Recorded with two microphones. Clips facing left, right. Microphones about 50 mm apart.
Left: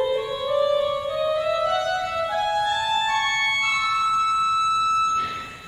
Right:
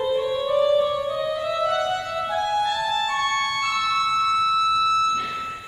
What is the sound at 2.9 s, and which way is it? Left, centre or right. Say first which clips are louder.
Music: left 1 dB; left.